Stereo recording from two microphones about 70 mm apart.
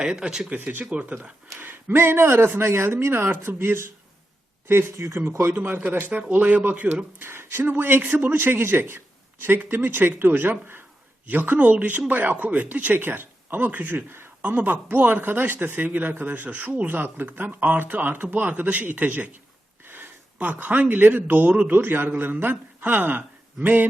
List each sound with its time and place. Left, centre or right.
0.0 s speech: centre
0.5 s speech: right